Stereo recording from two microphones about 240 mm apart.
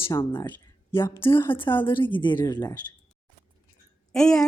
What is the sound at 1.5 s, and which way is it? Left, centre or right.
A woman's voice, left.